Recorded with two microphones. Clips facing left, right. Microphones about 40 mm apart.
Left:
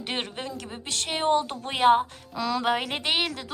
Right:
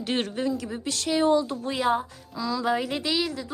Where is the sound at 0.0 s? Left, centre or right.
Left.